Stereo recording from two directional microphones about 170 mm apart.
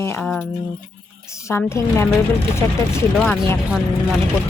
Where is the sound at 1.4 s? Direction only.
15° left (ahead or behind).